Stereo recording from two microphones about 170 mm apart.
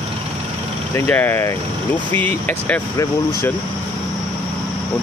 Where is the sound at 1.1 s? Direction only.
10° left (ahead or behind).